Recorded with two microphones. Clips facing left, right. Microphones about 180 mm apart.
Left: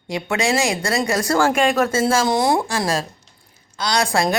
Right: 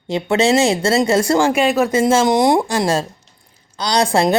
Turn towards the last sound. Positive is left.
turn(degrees=-25)  # may be behind; listen again after turning